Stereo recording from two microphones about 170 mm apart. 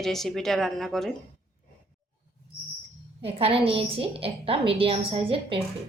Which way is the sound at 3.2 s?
35° right (ahead or behind).